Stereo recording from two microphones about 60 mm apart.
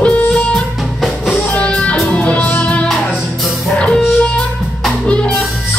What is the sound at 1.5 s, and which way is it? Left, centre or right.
Music, centre.